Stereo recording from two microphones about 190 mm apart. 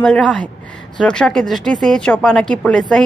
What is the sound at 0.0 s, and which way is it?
Speech, 5° left (ahead or behind).